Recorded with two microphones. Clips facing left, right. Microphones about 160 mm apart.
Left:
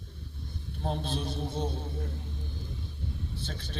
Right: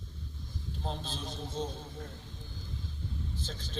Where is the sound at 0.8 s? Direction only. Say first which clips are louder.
Left 7 dB; 60° left (ahead or behind).